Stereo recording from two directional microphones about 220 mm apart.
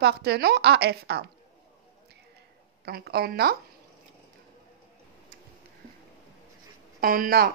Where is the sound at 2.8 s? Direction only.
45° right (ahead or behind).